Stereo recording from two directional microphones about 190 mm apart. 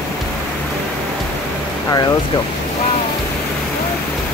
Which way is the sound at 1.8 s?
20° left (ahead or behind).